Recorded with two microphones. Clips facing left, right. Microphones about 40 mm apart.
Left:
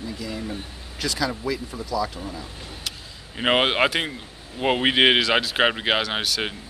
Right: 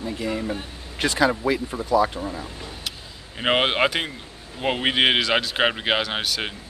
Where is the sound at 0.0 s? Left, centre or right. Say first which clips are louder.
Right 4 dB; right.